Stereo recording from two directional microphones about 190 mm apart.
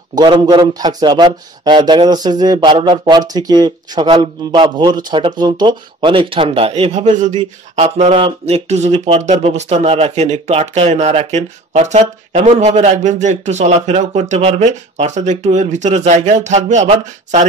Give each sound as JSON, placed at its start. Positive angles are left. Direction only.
{"t": 0.2, "sound": "speech", "side_deg": -25}